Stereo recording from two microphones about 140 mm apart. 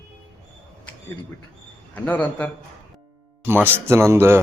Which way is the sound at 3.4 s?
15° right (ahead or behind).